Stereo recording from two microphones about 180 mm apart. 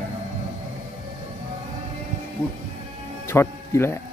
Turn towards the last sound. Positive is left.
turn(degrees=15)  # may be behind; listen again after turning